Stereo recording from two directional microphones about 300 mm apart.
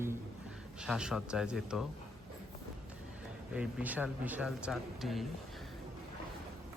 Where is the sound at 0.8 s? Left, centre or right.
Centre.